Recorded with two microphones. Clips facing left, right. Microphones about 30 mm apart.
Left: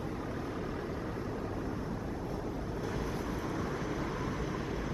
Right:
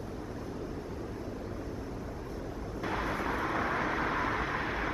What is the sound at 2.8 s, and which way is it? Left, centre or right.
Vehicle, right.